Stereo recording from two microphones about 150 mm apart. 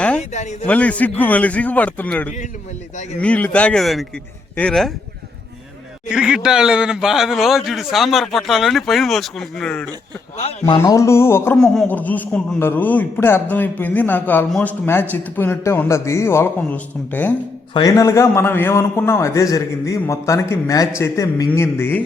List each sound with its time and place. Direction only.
0.2 s speech: 50° left (ahead or behind)
0.7 s a man's voice: 10° left (ahead or behind)
6.1 s speech: 5° right (ahead or behind)
10.7 s a man's voice: 25° left (ahead or behind)
11.5 s a man's voice: 5° left (ahead or behind)
17.7 s a man's voice: 25° left (ahead or behind)